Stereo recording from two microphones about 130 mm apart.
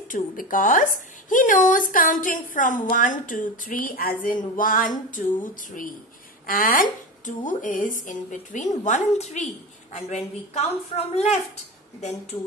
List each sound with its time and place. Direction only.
0.1 s a woman's voice: 90° left; by 8.6 s 75° left (ahead or behind)
8.8 s a woman's voice: 65° left (ahead or behind)